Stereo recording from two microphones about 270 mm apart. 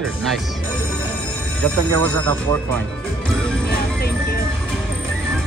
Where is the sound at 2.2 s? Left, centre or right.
Centre.